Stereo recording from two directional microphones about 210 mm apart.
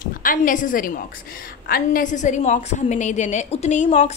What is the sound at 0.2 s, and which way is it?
A woman's voice, 40° left (ahead or behind).